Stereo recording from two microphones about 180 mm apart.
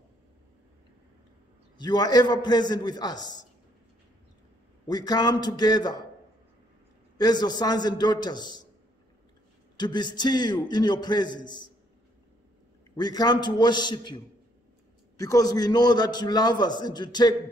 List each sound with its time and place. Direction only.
1.8 s a man's voice: 25° left (ahead or behind)
4.8 s a man's voice: 20° left (ahead or behind)
7.2 s a man's voice: 25° left (ahead or behind)
9.8 s a man's voice: 25° left (ahead or behind)
12.9 s a man's voice: 20° left (ahead or behind)